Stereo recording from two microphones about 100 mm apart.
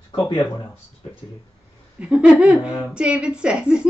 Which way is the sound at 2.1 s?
10° right (ahead or behind).